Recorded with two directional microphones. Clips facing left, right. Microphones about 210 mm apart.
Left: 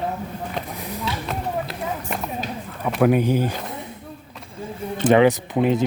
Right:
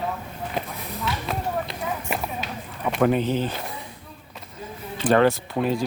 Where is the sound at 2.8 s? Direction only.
5° left (ahead or behind).